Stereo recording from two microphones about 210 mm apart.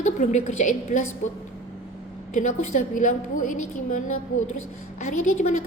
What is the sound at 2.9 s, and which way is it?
Speech, 40° left (ahead or behind).